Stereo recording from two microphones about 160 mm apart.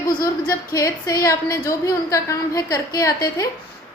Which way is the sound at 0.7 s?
20° left (ahead or behind).